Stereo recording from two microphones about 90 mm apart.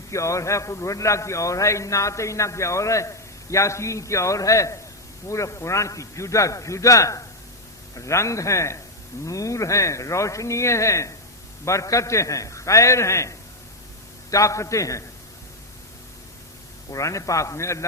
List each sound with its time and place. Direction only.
0.1 s a man's voice: 35° left (ahead or behind)
16.9 s a man's voice: 35° left (ahead or behind)